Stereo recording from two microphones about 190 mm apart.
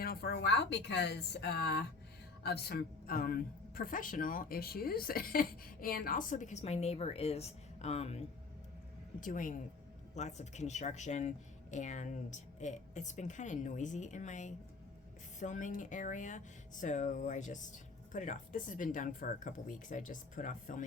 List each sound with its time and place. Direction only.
0.0 s a woman's voice: 55° left (ahead or behind); by 8.2 s 35° left (ahead or behind)
9.2 s speech: 45° left (ahead or behind)